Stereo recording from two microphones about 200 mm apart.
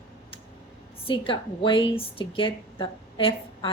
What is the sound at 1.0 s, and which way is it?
A woman's voice, 25° left (ahead or behind).